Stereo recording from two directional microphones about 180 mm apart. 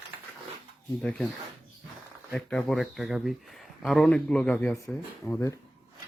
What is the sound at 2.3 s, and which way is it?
Speech, centre (ahead or behind).